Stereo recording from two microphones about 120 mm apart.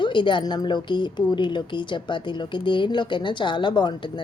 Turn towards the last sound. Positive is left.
turn(degrees=40)  # may be behind; listen again after turning